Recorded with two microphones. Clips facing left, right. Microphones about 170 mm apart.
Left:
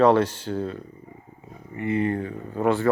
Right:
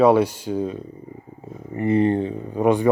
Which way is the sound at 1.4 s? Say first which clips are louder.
Right 6 dB; 35° right (ahead or behind).